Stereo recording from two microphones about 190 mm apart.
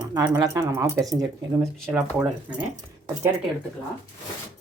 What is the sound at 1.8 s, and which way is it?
Speech, 5° right (ahead or behind).